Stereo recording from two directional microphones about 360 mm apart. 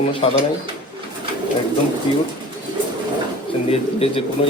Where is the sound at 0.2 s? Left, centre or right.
Centre.